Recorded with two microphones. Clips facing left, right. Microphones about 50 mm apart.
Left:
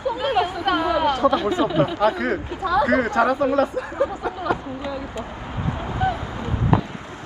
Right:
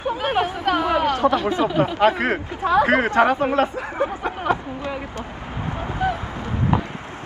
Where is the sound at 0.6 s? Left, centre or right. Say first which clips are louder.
Even; centre.